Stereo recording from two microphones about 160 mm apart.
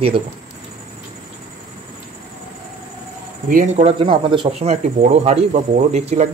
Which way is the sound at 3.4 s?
55° right (ahead or behind).